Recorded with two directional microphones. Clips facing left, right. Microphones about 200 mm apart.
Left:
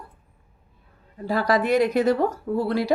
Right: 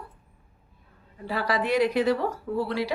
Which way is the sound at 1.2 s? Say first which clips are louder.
Left 5 dB; 45° left (ahead or behind).